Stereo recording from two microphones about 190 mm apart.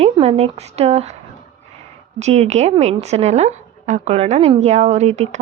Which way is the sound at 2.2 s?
35° right (ahead or behind).